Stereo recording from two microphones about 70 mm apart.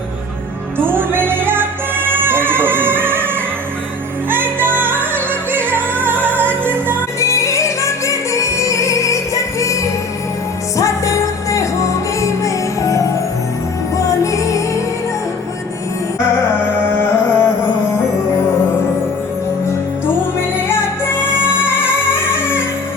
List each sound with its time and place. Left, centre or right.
0.8 s music: right
4.3 s music: right
7.2 s music: left
16.8 s music: left